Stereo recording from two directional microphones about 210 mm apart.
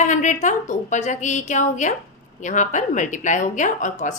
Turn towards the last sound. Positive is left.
turn(degrees=35)  # may be behind; listen again after turning